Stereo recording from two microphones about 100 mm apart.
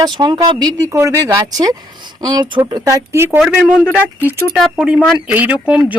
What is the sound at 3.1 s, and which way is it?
Speech, 25° right (ahead or behind).